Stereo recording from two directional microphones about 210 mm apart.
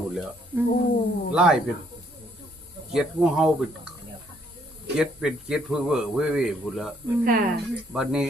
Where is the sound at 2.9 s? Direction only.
5° right (ahead or behind).